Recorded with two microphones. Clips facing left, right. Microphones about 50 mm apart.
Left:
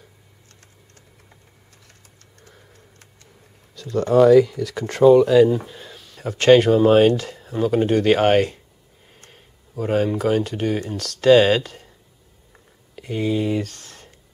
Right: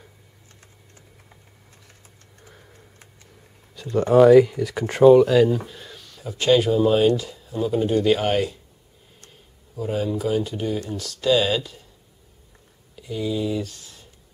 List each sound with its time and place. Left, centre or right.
1.9 s a sound: centre
3.7 s speech: centre
6.1 s speech: left
9.8 s speech: left
12.9 s speech: left